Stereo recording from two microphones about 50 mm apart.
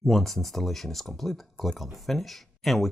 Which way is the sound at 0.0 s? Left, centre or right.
Centre.